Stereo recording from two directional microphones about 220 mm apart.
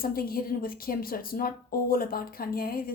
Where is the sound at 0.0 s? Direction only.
40° left (ahead or behind).